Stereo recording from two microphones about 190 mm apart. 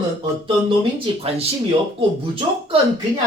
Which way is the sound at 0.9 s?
30° right (ahead or behind).